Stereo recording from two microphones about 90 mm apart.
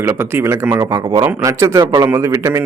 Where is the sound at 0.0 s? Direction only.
25° right (ahead or behind).